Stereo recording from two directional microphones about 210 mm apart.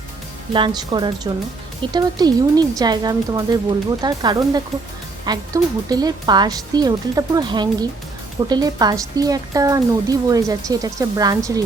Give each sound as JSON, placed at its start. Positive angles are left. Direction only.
{"t": 0.5, "sound": "speech", "side_deg": -20}